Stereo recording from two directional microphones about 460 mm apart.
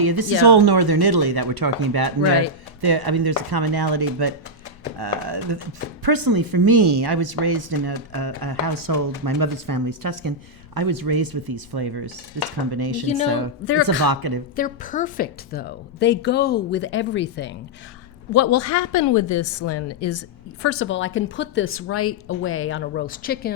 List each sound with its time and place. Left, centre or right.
0.0 s speech: right
14.5 s a woman's voice: centre
18.3 s a woman's voice: left; by 23.5 s centre